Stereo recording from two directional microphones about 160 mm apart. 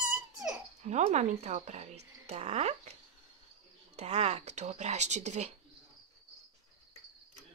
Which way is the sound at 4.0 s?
40° right (ahead or behind).